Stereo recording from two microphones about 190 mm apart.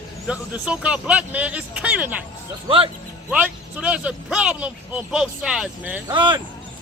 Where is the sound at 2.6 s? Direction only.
30° right (ahead or behind).